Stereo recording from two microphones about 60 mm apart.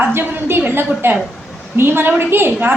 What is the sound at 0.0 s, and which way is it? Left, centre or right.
A woman's voice, right.